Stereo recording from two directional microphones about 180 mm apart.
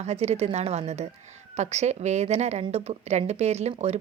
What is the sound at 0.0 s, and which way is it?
A woman's voice, 35° right (ahead or behind).